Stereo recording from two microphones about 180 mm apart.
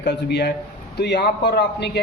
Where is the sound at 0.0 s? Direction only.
65° left (ahead or behind).